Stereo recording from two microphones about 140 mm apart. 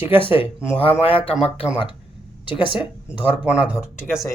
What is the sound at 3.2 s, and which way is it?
Speech, 5° right (ahead or behind).